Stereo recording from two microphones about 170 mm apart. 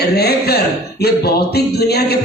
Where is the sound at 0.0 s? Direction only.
70° left (ahead or behind).